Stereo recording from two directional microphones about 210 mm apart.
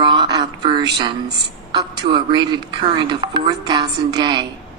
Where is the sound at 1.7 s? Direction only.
20° right (ahead or behind).